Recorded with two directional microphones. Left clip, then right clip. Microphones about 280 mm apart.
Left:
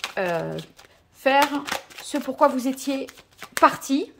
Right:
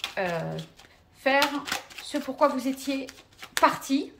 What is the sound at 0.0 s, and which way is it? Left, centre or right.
A woman's voice, left.